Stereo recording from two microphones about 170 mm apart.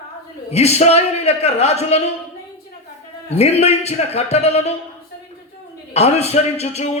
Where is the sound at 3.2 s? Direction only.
40° left (ahead or behind).